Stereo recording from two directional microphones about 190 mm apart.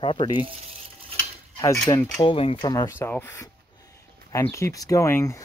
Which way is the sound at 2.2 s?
30° left (ahead or behind).